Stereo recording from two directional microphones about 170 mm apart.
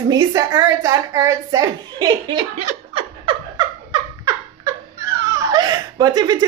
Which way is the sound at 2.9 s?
30° right (ahead or behind).